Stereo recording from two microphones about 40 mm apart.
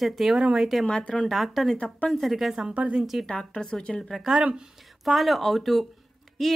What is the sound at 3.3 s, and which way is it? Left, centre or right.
Speech, left.